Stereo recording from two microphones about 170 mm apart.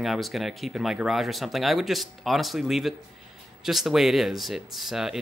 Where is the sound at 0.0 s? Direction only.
Centre (ahead or behind).